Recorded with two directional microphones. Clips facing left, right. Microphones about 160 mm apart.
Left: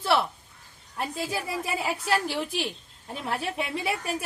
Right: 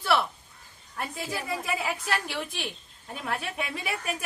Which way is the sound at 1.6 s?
30° left (ahead or behind).